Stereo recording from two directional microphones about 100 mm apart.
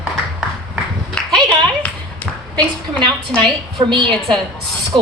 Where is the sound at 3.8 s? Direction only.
50° right (ahead or behind).